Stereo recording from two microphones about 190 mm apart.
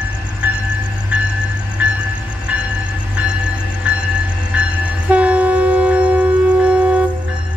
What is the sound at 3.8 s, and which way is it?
Music, 5° right (ahead or behind).